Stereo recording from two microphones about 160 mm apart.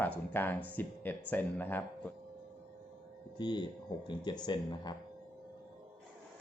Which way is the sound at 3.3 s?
25° left (ahead or behind).